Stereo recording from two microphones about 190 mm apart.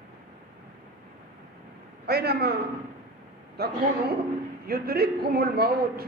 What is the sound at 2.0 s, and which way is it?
Speech, 55° right (ahead or behind).